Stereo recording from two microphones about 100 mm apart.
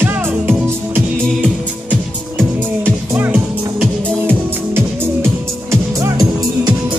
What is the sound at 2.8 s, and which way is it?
Music, 15° right (ahead or behind).